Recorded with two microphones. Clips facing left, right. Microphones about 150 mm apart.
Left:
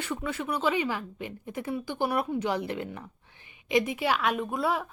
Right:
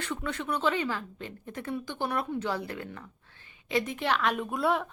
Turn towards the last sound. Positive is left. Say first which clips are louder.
# even
turn(degrees=0)  # may be behind; listen again after turning